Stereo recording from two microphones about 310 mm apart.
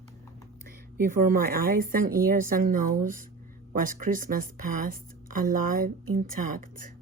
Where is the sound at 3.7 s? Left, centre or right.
Right.